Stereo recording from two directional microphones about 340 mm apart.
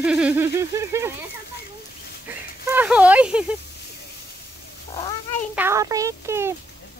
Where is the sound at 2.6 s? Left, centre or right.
Centre.